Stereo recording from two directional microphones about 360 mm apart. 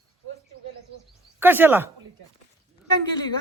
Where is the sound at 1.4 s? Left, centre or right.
Centre.